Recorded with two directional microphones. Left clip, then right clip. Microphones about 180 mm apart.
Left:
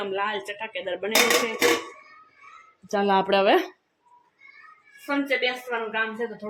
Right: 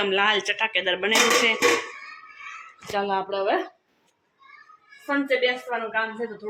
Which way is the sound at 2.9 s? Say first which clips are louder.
Left 2 dB; 40° left (ahead or behind).